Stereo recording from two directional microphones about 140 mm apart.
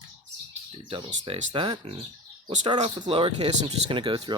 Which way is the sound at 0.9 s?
40° right (ahead or behind).